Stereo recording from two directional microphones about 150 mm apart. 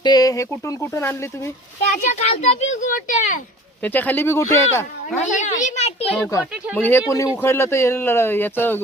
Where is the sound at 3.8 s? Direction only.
10° left (ahead or behind).